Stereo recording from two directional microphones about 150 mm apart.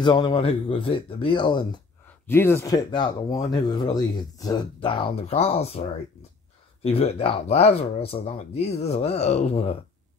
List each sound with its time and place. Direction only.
0.0 s speech: 30° left (ahead or behind)
2.0 s speech: 15° left (ahead or behind); by 9.8 s 45° left (ahead or behind)